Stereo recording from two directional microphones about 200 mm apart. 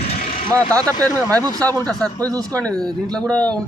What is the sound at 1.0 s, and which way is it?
Speech, 15° right (ahead or behind).